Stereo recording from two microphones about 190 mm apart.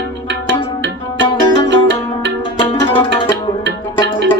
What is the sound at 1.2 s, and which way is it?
Music, 70° right (ahead or behind).